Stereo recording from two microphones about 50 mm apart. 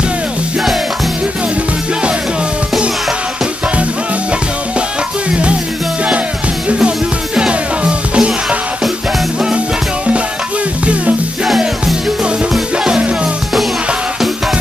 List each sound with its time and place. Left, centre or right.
7.3 s music: centre
12.7 s music: centre